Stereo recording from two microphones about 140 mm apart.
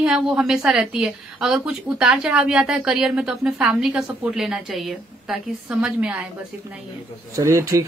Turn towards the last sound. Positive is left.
turn(degrees=-20)  # may be behind; listen again after turning